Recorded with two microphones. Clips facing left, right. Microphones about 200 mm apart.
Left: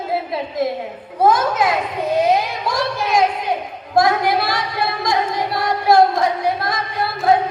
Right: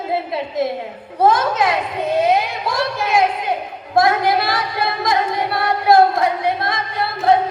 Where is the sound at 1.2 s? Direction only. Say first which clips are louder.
Even; 30° right (ahead or behind).